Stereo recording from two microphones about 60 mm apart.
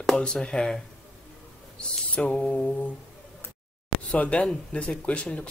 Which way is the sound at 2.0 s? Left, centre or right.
Left.